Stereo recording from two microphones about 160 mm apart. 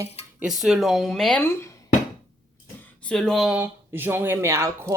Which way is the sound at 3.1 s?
5° left (ahead or behind).